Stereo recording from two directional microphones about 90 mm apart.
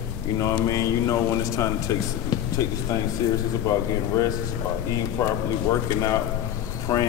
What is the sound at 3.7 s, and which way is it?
Speech, 35° left (ahead or behind).